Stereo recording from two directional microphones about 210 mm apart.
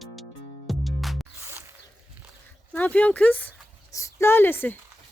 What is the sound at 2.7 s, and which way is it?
Speech, 5° left (ahead or behind).